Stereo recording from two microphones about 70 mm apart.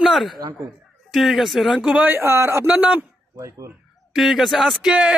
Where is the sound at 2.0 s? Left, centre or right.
Right.